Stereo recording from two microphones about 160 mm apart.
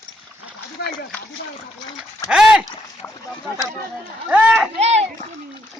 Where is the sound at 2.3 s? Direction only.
5° right (ahead or behind).